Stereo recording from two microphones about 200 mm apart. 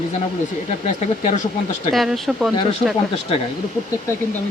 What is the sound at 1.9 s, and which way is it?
Speech, centre (ahead or behind).